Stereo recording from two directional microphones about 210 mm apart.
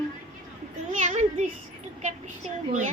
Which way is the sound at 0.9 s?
35° right (ahead or behind).